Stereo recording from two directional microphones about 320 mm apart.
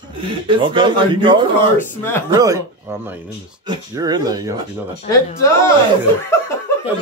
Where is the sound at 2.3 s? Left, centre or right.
Centre.